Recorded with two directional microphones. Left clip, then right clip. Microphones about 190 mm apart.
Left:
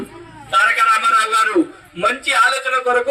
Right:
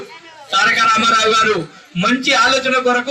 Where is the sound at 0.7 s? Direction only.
60° left (ahead or behind).